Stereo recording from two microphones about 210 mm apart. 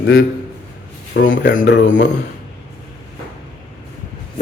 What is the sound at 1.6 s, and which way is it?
Speech, 55° left (ahead or behind).